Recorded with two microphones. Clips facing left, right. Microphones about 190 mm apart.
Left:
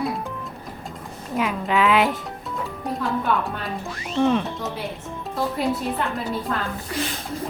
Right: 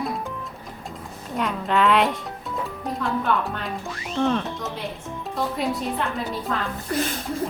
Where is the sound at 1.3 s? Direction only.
5° left (ahead or behind).